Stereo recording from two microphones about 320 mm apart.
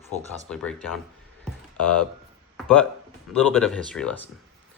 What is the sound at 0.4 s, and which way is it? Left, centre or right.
Speech, centre.